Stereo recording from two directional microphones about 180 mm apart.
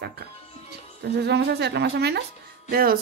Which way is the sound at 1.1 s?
65° right (ahead or behind).